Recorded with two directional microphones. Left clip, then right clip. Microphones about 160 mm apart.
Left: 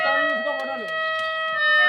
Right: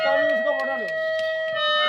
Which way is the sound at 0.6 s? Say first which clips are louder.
Right 3 dB; 55° right (ahead or behind).